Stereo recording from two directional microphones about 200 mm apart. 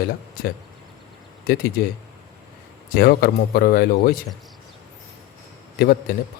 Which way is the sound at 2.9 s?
50° left (ahead or behind).